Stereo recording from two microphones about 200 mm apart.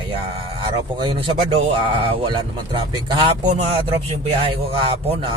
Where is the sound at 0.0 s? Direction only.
25° right (ahead or behind).